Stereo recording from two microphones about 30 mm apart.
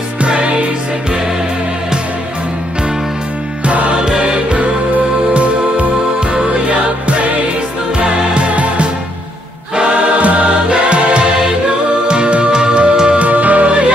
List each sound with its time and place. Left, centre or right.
0.2 s music: right
3.6 s music: right
4.0 s music: right
4.6 s music: right
6.1 s music: right
6.7 s music: right
8.0 s music: right
10.1 s music: right
10.9 s music: right
13.2 s music: right
13.7 s music: right